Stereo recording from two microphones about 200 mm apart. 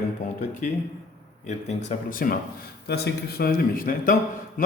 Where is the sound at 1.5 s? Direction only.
35° left (ahead or behind).